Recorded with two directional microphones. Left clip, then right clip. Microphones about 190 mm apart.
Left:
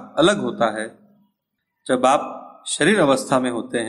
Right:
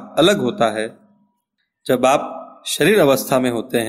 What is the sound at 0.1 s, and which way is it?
A man's voice, 35° right (ahead or behind).